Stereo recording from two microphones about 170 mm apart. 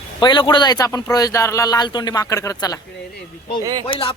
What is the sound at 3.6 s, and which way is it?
Speech, 25° right (ahead or behind).